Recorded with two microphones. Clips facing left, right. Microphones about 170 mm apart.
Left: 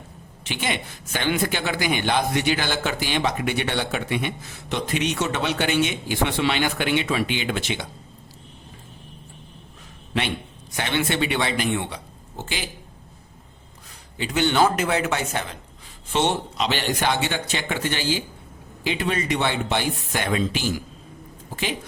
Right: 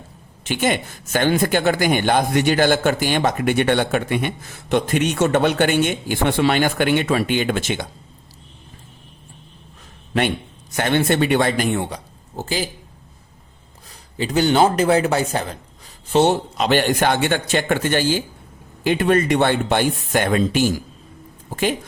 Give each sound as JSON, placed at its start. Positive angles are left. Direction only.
{"t": 0.4, "sound": "speech", "side_deg": -50}
{"t": 10.8, "sound": "speech", "side_deg": -50}
{"t": 14.2, "sound": "a woman's voice", "side_deg": -35}